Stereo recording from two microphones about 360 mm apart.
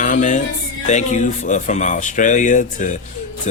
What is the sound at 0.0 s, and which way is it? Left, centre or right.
Music, left.